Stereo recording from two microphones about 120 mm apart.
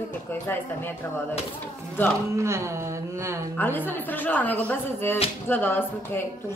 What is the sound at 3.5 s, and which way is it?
A woman's voice, 15° left (ahead or behind).